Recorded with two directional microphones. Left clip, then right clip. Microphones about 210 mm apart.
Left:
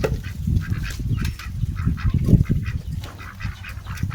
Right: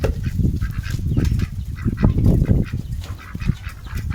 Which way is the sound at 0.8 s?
Centre (ahead or behind).